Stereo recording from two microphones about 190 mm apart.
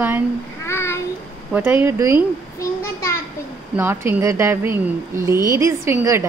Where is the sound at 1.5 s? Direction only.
10° right (ahead or behind).